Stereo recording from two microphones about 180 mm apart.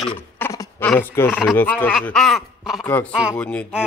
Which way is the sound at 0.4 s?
15° left (ahead or behind).